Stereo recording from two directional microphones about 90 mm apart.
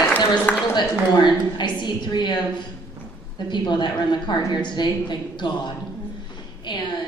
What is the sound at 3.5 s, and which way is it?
A woman's voice, 55° left (ahead or behind).